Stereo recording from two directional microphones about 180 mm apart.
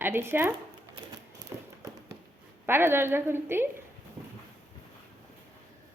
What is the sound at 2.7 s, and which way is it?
Speech, 10° right (ahead or behind).